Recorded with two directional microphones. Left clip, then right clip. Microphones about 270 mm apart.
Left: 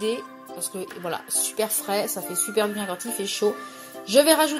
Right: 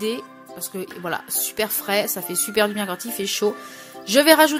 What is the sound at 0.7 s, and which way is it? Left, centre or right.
Speech, right.